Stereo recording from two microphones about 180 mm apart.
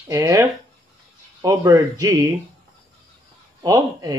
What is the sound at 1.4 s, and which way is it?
Speech, 20° right (ahead or behind).